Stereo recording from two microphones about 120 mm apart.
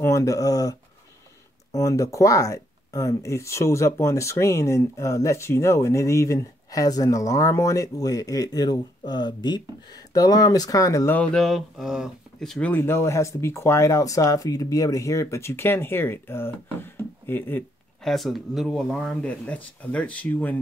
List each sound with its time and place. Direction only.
0.0 s speech: 25° left (ahead or behind)
11.1 s speech: 5° left (ahead or behind)
18.0 s speech: centre (ahead or behind)